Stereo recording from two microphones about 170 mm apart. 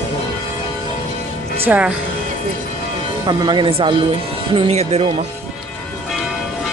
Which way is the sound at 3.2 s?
25° right (ahead or behind).